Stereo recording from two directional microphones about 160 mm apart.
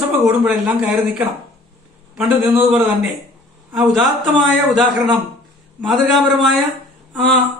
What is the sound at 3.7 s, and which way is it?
A man's voice, centre (ahead or behind).